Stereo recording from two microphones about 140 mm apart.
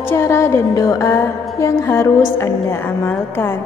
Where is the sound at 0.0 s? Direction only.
20° left (ahead or behind).